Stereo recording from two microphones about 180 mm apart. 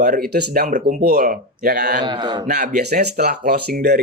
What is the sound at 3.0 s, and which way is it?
Speech, 60° right (ahead or behind).